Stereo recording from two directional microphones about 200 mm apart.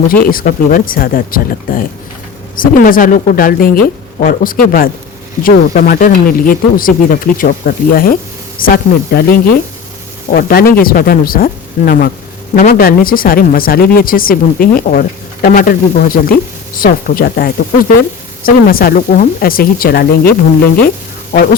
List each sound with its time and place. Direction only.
0.1 s speech: 45° left (ahead or behind)